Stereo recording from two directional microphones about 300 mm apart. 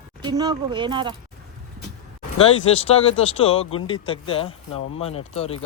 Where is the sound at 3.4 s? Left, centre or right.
Centre.